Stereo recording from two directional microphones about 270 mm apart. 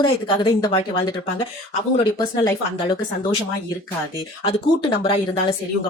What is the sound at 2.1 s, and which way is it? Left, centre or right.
Speech, centre.